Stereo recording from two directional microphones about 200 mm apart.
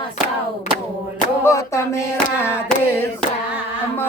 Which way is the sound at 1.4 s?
15° left (ahead or behind).